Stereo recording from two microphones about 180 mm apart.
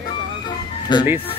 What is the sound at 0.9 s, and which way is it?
Speech, 25° left (ahead or behind).